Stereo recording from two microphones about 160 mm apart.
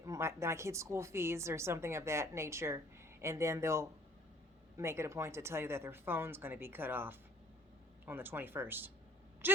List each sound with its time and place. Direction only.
0.0 s a woman's voice: 20° right (ahead or behind)